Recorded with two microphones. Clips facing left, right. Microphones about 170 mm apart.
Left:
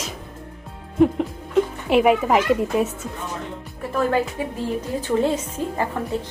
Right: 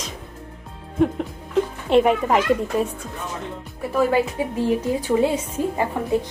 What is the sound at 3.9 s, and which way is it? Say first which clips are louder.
Speech: right 2 dB; 10° right (ahead or behind).